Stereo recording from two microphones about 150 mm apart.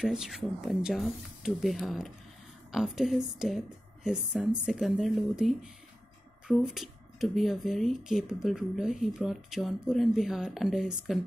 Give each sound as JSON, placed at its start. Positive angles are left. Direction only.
{"t": 0.0, "sound": "speech", "side_deg": 0}